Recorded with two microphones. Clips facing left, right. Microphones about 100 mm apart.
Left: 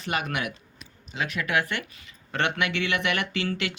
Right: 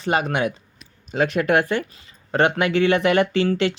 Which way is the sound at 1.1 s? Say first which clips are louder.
Right 9 dB; 45° right (ahead or behind).